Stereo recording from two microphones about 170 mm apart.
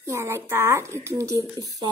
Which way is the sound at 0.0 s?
15° right (ahead or behind).